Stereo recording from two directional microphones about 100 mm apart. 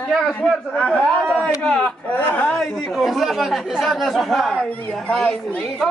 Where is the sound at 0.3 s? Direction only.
10° left (ahead or behind).